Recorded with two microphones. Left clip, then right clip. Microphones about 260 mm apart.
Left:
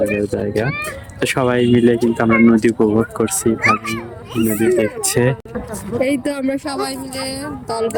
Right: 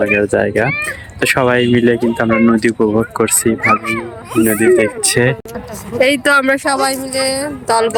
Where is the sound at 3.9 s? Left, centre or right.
Right.